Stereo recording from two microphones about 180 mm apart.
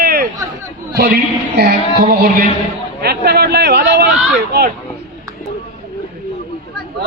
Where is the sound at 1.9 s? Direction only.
60° right (ahead or behind).